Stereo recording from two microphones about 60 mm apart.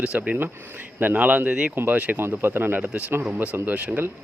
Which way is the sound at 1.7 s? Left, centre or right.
Right.